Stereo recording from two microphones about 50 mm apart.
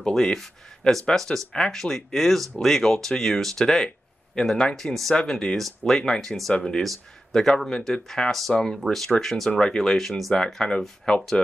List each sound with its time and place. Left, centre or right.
0.0 s speech: centre
9.9 s speech: centre